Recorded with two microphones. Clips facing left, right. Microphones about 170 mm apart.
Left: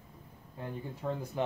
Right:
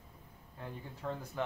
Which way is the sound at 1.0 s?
15° left (ahead or behind).